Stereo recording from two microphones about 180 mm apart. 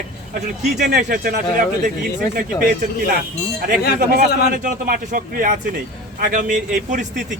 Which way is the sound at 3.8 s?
65° left (ahead or behind).